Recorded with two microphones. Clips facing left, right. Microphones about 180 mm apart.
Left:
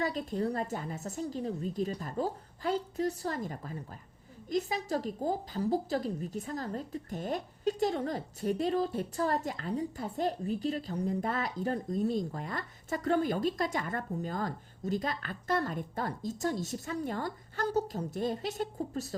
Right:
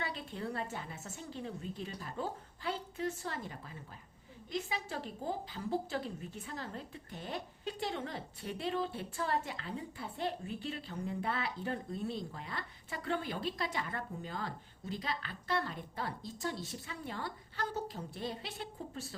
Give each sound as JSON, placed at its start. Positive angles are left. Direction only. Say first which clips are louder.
{"t": 0.0, "sound": "a woman's voice", "louder": "left 9 dB", "side_deg": 40}